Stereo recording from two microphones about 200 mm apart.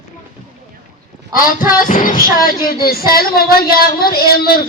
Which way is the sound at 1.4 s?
45° left (ahead or behind).